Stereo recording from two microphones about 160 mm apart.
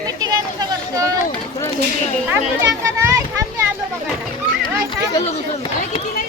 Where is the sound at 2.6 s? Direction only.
20° right (ahead or behind).